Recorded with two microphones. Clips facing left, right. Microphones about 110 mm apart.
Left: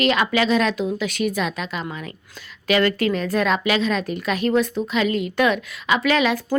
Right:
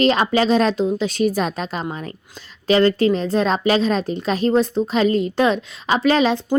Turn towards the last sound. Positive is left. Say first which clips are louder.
# right 3 dB
turn(degrees=-30)  # may be behind; listen again after turning